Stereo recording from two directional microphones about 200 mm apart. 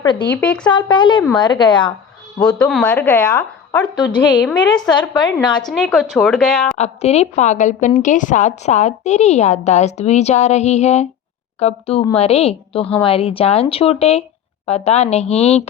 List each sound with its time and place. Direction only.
0.0 s speech: 25° left (ahead or behind)
0.3 s a woman's voice: 10° left (ahead or behind)
0.7 s a woman's voice: 25° left (ahead or behind)
2.4 s a woman's voice: 5° left (ahead or behind)
3.9 s a woman's voice: 25° left (ahead or behind)
4.4 s a woman's voice: 5° left (ahead or behind)
5.4 s a woman's voice: 20° left (ahead or behind)
5.7 s speech: centre (ahead or behind)
6.7 s a woman's voice: 35° left (ahead or behind)